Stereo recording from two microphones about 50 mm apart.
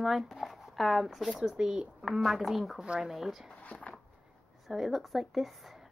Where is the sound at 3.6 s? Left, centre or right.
Left.